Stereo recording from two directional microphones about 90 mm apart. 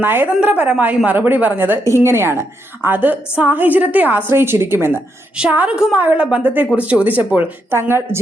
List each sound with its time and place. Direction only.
0.0 s a woman's voice: 20° right (ahead or behind)
5.4 s a woman's voice: 15° right (ahead or behind)